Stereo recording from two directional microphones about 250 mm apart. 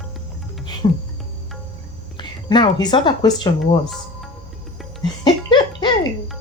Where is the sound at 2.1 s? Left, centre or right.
Centre.